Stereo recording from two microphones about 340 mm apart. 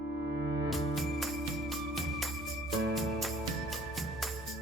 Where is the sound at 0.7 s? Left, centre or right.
Centre.